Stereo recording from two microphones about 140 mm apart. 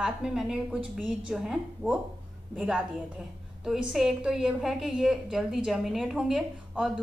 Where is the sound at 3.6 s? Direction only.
5° right (ahead or behind).